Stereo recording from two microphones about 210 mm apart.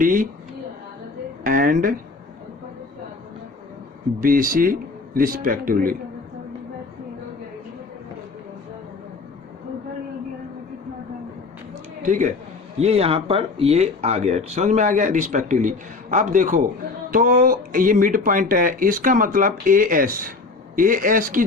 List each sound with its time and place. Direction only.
0.0 s speech: 40° right (ahead or behind)
1.5 s speech: 40° right (ahead or behind)
4.2 s speech: 40° right (ahead or behind)
12.0 s speech: 40° right (ahead or behind)